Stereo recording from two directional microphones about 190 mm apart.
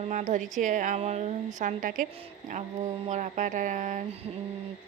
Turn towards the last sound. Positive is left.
turn(degrees=-40)  # may be behind; listen again after turning